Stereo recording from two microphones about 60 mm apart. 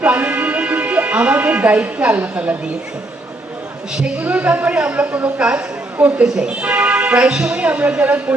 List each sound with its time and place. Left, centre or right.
0.0 s a sound: right
4.2 s speech: right
6.0 s speech: right
6.2 s speech: centre
6.6 s speech: right